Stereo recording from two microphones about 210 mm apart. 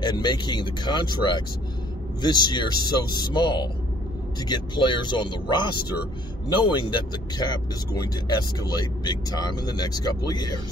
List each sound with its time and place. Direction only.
0.0 s speech: 20° left (ahead or behind)